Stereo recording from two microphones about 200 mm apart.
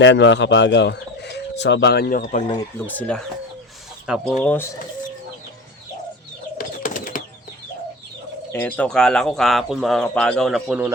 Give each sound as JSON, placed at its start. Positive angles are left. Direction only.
{"t": 0.0, "sound": "speech", "side_deg": 60}
{"t": 2.8, "sound": "speech", "side_deg": 5}
{"t": 4.4, "sound": "speech", "side_deg": 10}
{"t": 6.6, "sound": "bird", "side_deg": 45}
{"t": 8.5, "sound": "speech", "side_deg": 10}